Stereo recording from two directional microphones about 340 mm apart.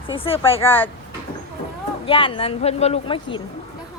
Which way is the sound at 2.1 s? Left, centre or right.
Centre.